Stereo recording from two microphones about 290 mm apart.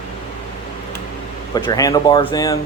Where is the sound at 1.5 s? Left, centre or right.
Centre.